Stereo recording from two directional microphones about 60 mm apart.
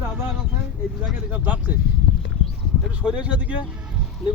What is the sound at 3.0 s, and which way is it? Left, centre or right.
Speech, centre.